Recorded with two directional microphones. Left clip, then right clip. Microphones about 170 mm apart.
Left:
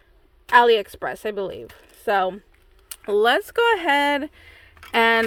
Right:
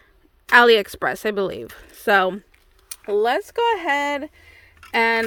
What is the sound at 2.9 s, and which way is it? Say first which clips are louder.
Speech: left 1 dB; centre (ahead or behind).